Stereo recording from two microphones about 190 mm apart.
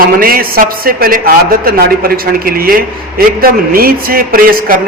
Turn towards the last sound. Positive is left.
turn(degrees=-50)  # may be behind; listen again after turning